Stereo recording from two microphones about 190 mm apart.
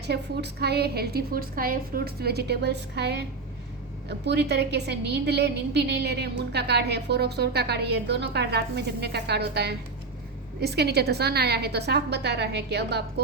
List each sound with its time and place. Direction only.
0.0 s a woman's voice: 60° right (ahead or behind)